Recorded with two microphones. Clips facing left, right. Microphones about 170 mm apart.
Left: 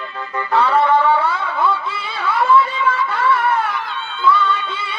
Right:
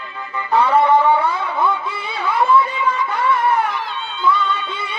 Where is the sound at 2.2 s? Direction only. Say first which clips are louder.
Left 1 dB; 20° right (ahead or behind).